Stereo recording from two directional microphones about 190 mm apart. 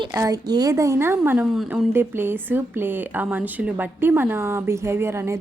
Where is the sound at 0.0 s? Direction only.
20° right (ahead or behind).